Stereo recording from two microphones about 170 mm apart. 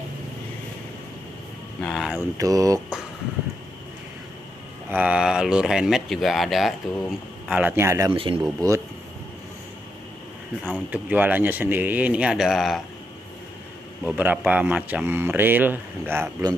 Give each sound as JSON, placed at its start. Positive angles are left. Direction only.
{"t": 1.8, "sound": "vehicle", "side_deg": 0}
{"t": 2.3, "sound": "a sound", "side_deg": -20}
{"t": 4.9, "sound": "speech", "side_deg": -5}
{"t": 8.1, "sound": "speech", "side_deg": -30}
{"t": 8.5, "sound": "speech", "side_deg": -15}
{"t": 10.6, "sound": "speech", "side_deg": -10}
{"t": 14.0, "sound": "speech", "side_deg": -10}